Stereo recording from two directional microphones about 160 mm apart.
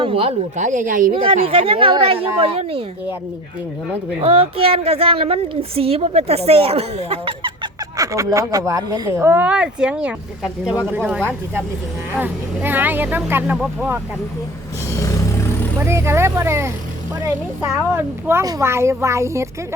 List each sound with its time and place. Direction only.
0.0 s a woman's voice: 35° right (ahead or behind); by 1.1 s 55° right (ahead or behind)
1.1 s a woman's voice: 35° right (ahead or behind)
4.2 s a woman's voice: 40° right (ahead or behind); by 14.0 s 10° right (ahead or behind)
15.8 s speech: 15° right (ahead or behind)